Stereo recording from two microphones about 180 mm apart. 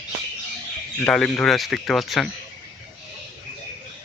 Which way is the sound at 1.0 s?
5° left (ahead or behind).